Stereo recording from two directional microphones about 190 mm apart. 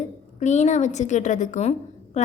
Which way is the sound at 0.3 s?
40° left (ahead or behind).